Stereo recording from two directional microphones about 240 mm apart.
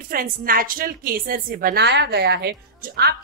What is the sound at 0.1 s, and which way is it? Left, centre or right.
A woman's voice, right.